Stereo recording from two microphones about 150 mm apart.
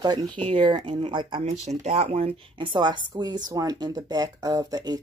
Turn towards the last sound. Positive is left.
turn(degrees=-25)  # may be behind; listen again after turning